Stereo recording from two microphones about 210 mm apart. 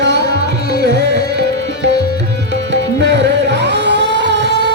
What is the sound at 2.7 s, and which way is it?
Music, 55° right (ahead or behind).